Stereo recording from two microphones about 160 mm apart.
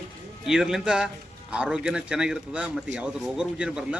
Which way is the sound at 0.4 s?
5° right (ahead or behind).